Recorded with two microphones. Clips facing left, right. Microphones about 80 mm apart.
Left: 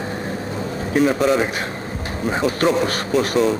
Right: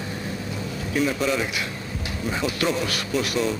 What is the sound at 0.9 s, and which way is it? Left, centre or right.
Speech, left.